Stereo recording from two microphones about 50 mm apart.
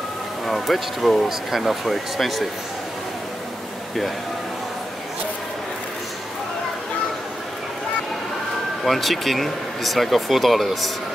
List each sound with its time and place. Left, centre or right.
0.5 s speech: centre
8.8 s speech: centre